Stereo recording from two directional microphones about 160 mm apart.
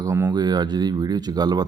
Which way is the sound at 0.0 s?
20° right (ahead or behind).